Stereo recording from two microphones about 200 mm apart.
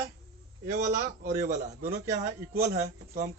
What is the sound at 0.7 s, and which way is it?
A man's voice, 45° right (ahead or behind).